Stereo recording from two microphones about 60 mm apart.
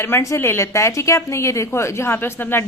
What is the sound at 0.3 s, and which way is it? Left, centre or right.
A woman's voice, left.